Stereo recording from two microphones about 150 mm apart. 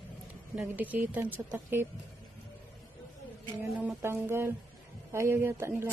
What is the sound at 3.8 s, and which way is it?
A man's voice, 15° right (ahead or behind).